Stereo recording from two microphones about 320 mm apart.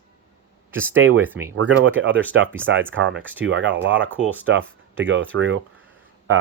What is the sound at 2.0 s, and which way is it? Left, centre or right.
Speech, right.